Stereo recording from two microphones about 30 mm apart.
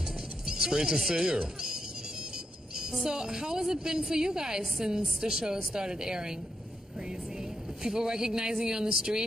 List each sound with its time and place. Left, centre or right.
0.5 s a woman's voice: centre